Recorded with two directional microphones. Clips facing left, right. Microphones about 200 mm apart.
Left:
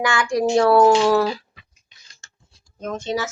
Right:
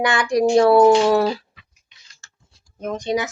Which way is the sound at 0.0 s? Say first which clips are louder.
Right 2 dB; 20° right (ahead or behind).